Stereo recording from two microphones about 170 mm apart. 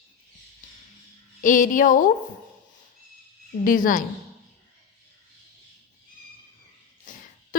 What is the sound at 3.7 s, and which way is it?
Speech, 50° left (ahead or behind).